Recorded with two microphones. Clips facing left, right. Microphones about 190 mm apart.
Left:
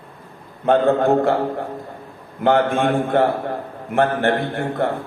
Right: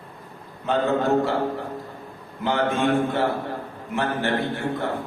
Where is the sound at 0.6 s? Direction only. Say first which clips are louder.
Left 6 dB; 55° left (ahead or behind).